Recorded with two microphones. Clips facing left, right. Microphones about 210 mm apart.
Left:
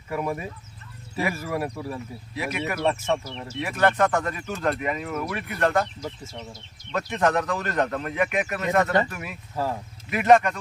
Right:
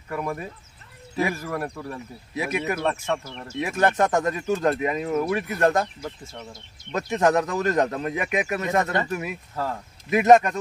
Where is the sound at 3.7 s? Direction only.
25° right (ahead or behind).